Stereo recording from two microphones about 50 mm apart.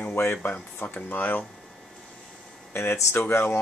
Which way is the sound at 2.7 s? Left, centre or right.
Left.